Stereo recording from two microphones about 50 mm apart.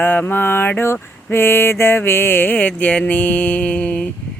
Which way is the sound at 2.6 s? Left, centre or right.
Left.